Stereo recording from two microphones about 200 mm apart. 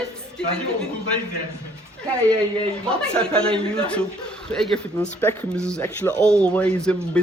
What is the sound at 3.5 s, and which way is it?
Speech, 5° left (ahead or behind).